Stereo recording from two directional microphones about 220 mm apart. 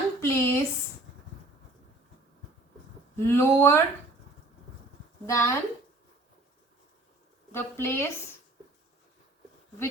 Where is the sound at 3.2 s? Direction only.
10° left (ahead or behind).